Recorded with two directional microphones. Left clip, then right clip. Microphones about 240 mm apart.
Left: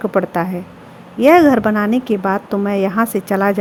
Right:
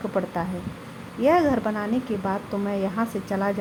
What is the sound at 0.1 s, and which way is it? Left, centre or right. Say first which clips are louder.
A woman's voice: left 9 dB; left.